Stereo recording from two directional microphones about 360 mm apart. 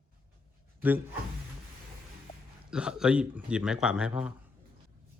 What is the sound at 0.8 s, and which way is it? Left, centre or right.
Speech, centre.